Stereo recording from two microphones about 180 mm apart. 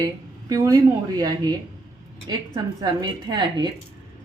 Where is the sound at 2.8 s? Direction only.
20° right (ahead or behind).